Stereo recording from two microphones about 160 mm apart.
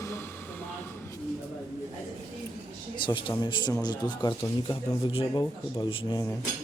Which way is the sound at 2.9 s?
30° left (ahead or behind).